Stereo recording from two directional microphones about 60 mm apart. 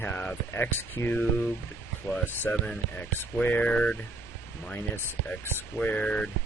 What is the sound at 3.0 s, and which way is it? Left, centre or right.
Speech, left.